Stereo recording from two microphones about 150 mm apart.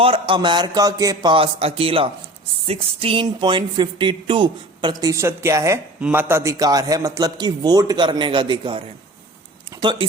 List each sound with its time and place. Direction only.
0.0 s a man's voice: 35° right (ahead or behind)
9.8 s speech: 30° right (ahead or behind)